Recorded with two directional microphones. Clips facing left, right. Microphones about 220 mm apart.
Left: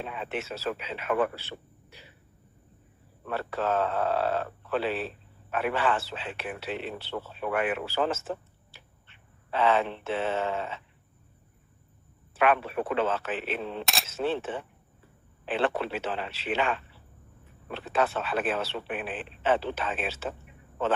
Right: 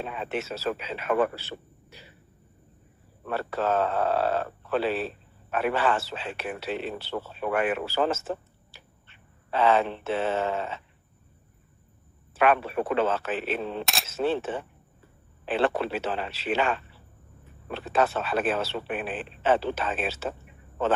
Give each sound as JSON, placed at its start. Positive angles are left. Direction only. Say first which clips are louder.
{"t": 0.0, "sound": "speech", "louder": "right 3 dB", "side_deg": -40}
{"t": 3.3, "sound": "speech", "louder": "right 2 dB", "side_deg": -40}
{"t": 12.4, "sound": "speech", "louder": "right 2 dB", "side_deg": -40}
{"t": 13.8, "sound": "speech", "louder": "even", "side_deg": 0}
{"t": 14.1, "sound": "speech", "louder": "right 3 dB", "side_deg": -40}